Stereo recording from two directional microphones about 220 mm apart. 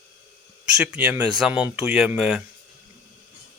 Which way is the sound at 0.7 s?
5° right (ahead or behind).